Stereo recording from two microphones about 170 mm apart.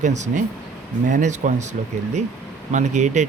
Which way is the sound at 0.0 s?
45° right (ahead or behind).